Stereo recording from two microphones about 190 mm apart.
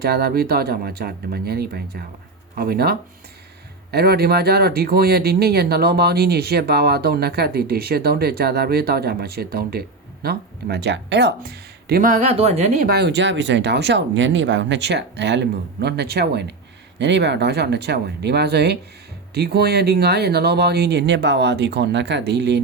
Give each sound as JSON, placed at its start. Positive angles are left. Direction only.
{"t": 0.0, "sound": "speech", "side_deg": -55}
{"t": 12.3, "sound": "speech", "side_deg": -35}
{"t": 12.9, "sound": "speech", "side_deg": -60}